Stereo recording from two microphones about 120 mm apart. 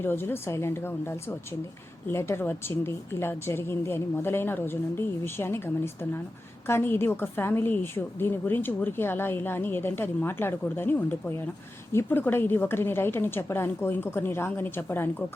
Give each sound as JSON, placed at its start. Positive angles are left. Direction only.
{"t": 0.0, "sound": "a woman's voice", "side_deg": 20}